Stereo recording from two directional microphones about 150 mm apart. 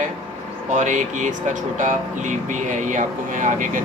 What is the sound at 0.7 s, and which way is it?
Speech, 55° right (ahead or behind).